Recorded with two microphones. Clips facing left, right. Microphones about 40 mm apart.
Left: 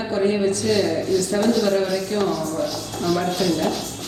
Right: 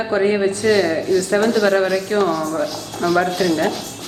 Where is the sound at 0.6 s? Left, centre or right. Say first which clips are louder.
Right 4 dB; centre.